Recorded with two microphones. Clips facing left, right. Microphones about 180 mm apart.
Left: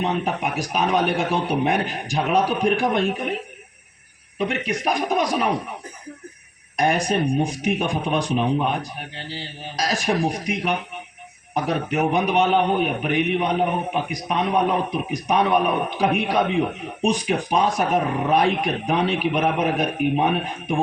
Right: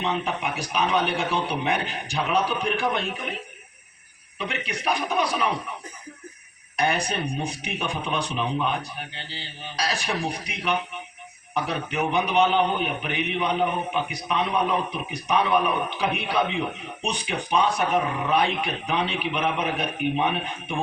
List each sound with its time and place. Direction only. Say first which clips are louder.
0.0 s a man's voice: left 3 dB; 45° left (ahead or behind)
4.4 s a man's voice: left 7 dB; 45° left (ahead or behind)
6.7 s a man's voice: left 5 dB; 45° left (ahead or behind)